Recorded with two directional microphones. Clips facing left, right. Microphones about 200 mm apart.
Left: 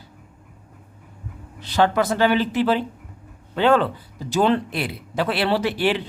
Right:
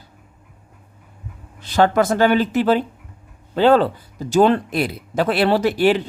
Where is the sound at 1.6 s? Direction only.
45° right (ahead or behind).